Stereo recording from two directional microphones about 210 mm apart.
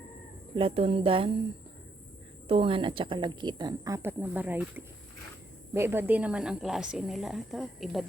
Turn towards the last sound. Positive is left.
turn(degrees=0)  # may be behind; listen again after turning